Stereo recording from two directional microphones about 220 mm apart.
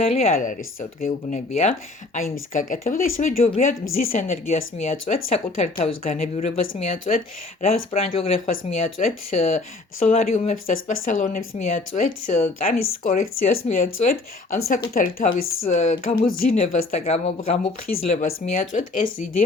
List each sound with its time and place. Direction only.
0.0 s speech: 30° left (ahead or behind)
5.7 s speech: 40° left (ahead or behind)
6.1 s speech: 30° left (ahead or behind)
16.6 s speech: 30° left (ahead or behind)
17.9 s speech: 40° left (ahead or behind)